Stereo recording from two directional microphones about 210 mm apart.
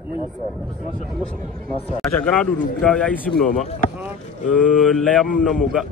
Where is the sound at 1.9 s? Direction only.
5° left (ahead or behind).